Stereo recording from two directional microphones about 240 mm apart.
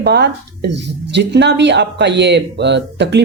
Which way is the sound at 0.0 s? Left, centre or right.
Right.